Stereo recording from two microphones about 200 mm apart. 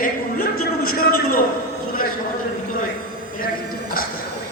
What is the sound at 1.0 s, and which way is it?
Speech, 50° left (ahead or behind).